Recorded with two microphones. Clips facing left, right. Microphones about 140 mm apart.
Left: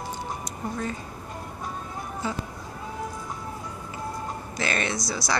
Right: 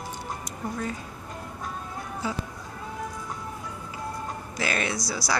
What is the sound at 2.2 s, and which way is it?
Speech, 5° right (ahead or behind).